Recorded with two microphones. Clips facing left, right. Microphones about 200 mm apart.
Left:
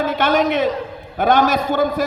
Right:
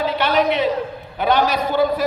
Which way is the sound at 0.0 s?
50° left (ahead or behind).